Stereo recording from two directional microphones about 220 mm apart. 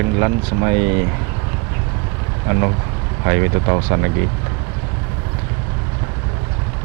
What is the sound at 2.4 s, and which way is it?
Speech, 20° right (ahead or behind).